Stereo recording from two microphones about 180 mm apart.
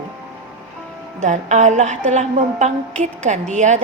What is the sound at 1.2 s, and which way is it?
A woman's voice, 40° right (ahead or behind).